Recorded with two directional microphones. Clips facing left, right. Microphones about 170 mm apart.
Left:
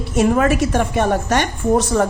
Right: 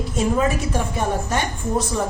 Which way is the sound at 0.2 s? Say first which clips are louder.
Left 6 dB; 70° left (ahead or behind).